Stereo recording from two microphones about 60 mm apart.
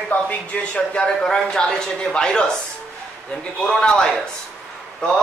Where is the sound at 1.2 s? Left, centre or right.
Centre.